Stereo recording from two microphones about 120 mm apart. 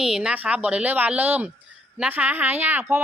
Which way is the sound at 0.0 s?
5° right (ahead or behind).